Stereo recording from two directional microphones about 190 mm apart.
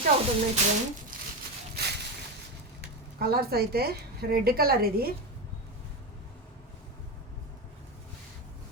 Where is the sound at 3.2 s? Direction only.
55° right (ahead or behind).